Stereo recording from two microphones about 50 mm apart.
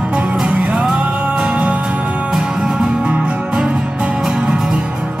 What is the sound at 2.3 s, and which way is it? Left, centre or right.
Music, centre.